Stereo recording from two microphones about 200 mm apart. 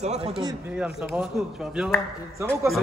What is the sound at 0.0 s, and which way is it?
Speech, 35° right (ahead or behind).